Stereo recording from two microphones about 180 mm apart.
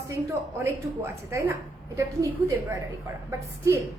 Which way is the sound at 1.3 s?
15° right (ahead or behind).